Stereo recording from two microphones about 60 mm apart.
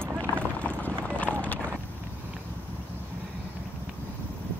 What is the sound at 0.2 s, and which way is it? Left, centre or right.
Clip-clop, left.